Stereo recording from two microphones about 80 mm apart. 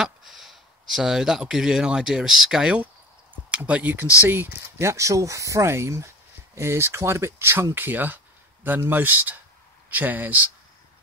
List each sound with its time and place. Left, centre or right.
0.0 s speech: centre; by 4.1 s right
4.3 s speech: right